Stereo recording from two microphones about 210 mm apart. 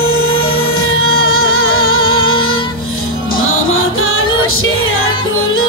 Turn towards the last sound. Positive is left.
turn(degrees=75)  # may be behind; listen again after turning